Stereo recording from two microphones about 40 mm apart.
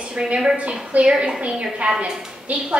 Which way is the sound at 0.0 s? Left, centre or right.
Right.